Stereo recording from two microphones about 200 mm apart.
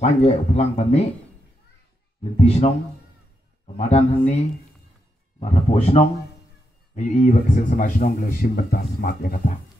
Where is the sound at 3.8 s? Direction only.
35° left (ahead or behind).